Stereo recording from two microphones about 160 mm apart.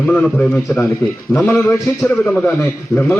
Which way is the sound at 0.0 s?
5° left (ahead or behind).